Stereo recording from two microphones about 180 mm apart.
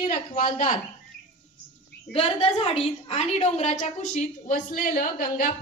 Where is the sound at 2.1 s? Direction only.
30° left (ahead or behind).